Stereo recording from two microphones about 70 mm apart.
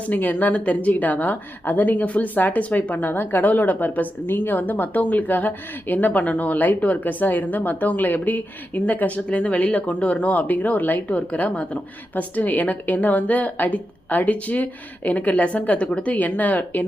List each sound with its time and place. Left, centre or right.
0.0 s speech: left